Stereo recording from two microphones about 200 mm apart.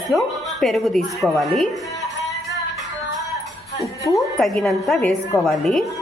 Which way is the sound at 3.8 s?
15° left (ahead or behind).